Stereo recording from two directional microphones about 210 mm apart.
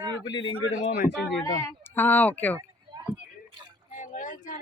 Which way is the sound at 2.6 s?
20° right (ahead or behind).